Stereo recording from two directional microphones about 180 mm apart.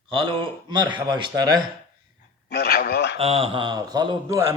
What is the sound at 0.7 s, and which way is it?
Speech, 25° right (ahead or behind).